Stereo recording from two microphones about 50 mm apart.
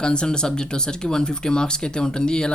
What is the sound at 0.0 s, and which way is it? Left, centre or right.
Speech, centre.